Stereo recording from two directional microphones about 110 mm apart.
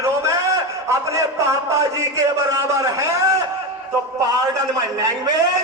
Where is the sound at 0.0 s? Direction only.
25° right (ahead or behind).